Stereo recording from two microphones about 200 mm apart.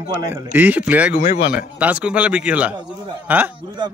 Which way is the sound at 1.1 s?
50° left (ahead or behind).